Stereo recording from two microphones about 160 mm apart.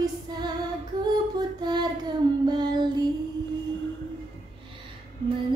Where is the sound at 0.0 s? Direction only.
25° right (ahead or behind).